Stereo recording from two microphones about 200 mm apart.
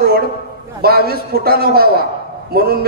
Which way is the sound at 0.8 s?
50° right (ahead or behind).